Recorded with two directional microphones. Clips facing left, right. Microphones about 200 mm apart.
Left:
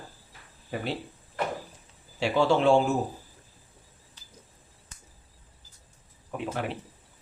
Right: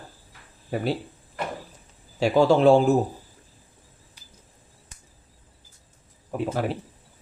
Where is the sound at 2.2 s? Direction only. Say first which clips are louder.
Right 5 dB; 40° right (ahead or behind).